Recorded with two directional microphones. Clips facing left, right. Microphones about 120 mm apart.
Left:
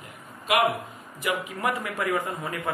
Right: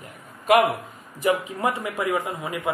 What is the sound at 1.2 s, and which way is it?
A man's voice, 25° right (ahead or behind).